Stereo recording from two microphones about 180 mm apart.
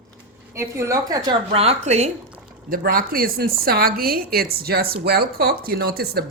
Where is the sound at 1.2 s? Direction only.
35° right (ahead or behind).